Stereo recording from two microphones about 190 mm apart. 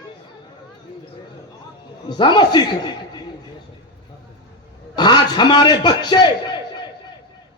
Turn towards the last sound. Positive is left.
turn(degrees=25)  # may be behind; listen again after turning